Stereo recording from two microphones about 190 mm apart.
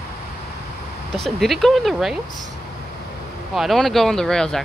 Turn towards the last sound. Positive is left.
turn(degrees=5)  # may be behind; listen again after turning